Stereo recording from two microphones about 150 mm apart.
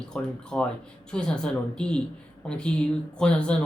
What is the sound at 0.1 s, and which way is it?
Speech, 5° left (ahead or behind).